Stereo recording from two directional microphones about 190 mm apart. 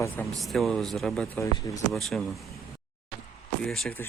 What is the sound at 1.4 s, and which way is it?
Speech, 15° left (ahead or behind).